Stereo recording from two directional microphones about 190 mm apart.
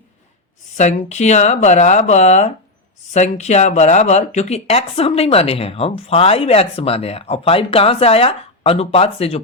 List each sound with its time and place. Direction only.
0.8 s speech: 40° left (ahead or behind)